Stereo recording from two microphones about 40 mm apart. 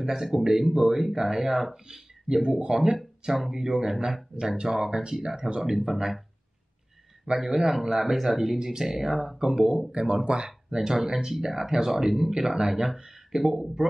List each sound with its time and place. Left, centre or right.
0.0 s speech: centre
4.3 s speech: right
4.6 s speech: centre
7.3 s speech: centre